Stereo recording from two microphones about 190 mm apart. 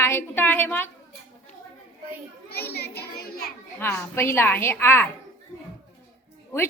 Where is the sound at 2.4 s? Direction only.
55° left (ahead or behind).